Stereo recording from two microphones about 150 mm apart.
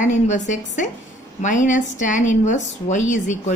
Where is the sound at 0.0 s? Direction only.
55° left (ahead or behind).